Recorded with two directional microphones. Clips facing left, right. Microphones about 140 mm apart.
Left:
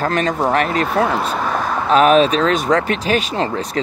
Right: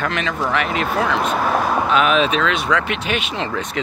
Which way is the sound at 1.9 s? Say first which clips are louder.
Left 8 dB; 40° left (ahead or behind).